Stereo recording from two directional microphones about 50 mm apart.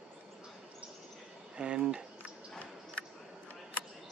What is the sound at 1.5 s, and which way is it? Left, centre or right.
Speech, centre.